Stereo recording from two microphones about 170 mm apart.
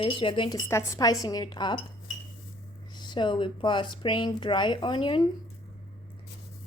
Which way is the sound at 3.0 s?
25° left (ahead or behind).